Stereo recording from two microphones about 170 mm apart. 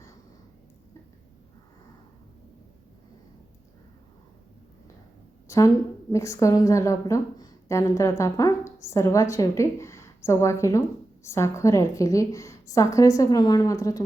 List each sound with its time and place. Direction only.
5.5 s a woman's voice: 20° left (ahead or behind)